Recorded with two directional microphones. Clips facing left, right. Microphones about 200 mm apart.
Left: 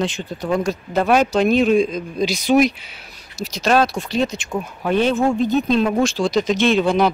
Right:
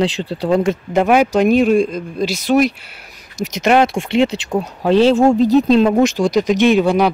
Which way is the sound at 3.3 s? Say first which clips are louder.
Right 4 dB; 20° right (ahead or behind).